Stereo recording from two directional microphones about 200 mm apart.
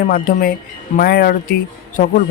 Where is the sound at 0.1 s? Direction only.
45° left (ahead or behind).